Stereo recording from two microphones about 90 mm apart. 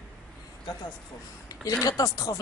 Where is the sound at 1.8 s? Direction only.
40° left (ahead or behind).